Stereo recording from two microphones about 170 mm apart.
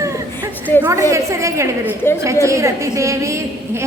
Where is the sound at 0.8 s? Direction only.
15° right (ahead or behind).